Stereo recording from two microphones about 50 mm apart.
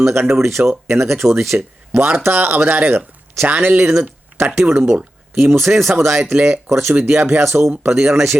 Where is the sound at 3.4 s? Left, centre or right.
Right.